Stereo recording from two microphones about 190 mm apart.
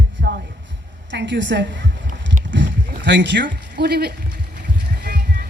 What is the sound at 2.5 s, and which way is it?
Rowboat, 70° right (ahead or behind).